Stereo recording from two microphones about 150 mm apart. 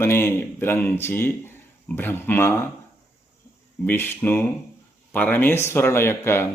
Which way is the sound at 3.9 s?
15° left (ahead or behind).